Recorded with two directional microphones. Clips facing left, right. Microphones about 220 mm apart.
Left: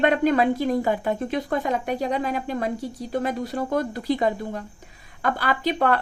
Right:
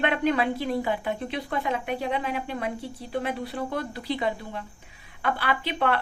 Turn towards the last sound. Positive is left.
turn(degrees=40)  # may be behind; listen again after turning